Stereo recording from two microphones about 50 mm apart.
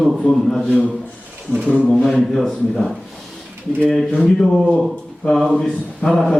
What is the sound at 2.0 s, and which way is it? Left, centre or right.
Speech, centre.